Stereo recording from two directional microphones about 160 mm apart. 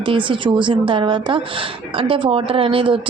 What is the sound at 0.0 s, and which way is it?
A woman's voice, 30° right (ahead or behind).